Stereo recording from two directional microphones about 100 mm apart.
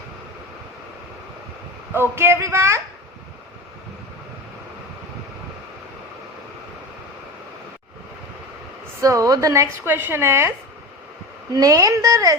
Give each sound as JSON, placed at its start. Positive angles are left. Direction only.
{"t": 1.9, "sound": "speech", "side_deg": -25}
{"t": 9.0, "sound": "a woman's voice", "side_deg": -35}
{"t": 11.5, "sound": "a woman's voice", "side_deg": -35}